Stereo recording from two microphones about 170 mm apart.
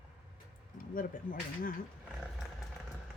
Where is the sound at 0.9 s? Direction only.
55° left (ahead or behind).